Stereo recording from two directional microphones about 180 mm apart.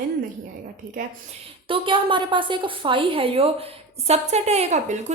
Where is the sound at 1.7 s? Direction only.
25° right (ahead or behind).